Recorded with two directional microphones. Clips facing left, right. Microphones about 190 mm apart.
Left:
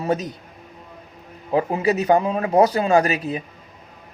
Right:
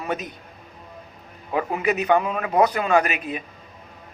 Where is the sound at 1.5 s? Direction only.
30° left (ahead or behind).